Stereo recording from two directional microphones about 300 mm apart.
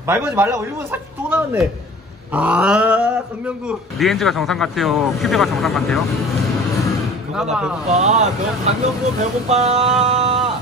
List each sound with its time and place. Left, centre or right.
0.0 s a man's voice: centre
7.9 s speech: right
10.0 s a sound: right